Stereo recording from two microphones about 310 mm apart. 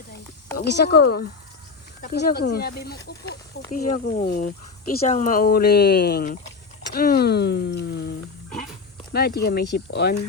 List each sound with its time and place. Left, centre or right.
0.5 s speech: left
9.1 s speech: left